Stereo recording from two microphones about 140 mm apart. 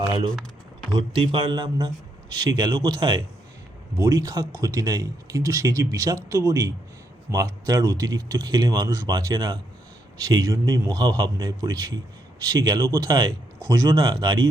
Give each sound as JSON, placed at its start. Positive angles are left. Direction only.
{"t": 0.9, "sound": "speech", "side_deg": -35}